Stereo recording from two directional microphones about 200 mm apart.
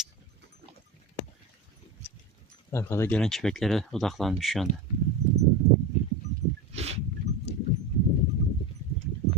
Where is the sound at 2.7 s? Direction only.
15° left (ahead or behind).